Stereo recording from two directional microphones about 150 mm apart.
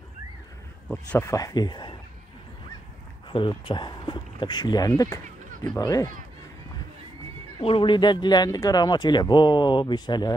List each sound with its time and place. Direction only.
1.2 s speech: 25° left (ahead or behind)
3.3 s speech: 35° left (ahead or behind)
7.6 s speech: 35° left (ahead or behind)